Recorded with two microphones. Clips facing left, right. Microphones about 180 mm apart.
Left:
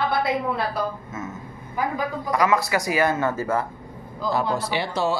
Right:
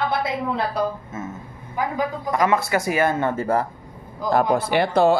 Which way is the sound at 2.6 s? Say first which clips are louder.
Right 1 dB; 50° right (ahead or behind).